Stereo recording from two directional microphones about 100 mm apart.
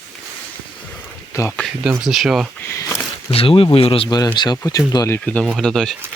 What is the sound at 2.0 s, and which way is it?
Speech, 5° right (ahead or behind).